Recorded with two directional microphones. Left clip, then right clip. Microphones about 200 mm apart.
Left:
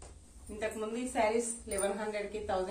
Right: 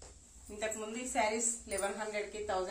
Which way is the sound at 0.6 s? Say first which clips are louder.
Left 3 dB; 10° right (ahead or behind).